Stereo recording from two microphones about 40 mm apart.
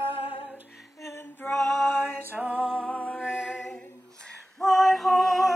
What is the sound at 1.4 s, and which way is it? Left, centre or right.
Female singing, left.